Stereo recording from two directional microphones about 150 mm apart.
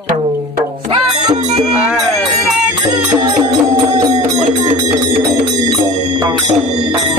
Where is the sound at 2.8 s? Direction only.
30° right (ahead or behind).